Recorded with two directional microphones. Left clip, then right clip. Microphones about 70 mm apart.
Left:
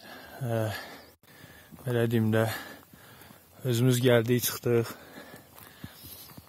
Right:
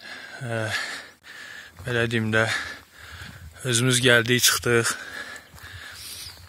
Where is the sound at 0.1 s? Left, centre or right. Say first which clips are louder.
Right 2 dB; left.